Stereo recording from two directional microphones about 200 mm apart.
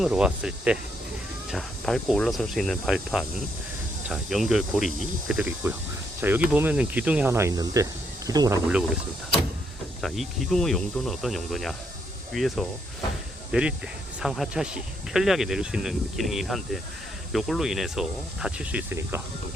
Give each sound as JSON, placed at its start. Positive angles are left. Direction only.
{"t": 0.0, "sound": "speech", "side_deg": -5}
{"t": 10.0, "sound": "speech", "side_deg": 0}